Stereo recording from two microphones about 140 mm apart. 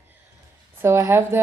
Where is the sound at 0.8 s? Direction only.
20° right (ahead or behind).